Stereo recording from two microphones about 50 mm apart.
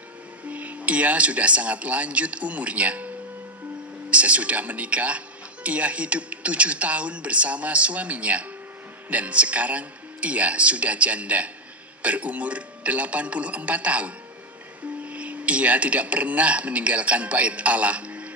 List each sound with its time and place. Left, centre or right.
0.5 s speech: right
4.1 s speech: right